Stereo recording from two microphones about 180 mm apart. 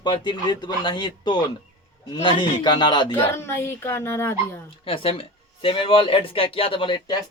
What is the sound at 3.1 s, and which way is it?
Speech, 15° left (ahead or behind).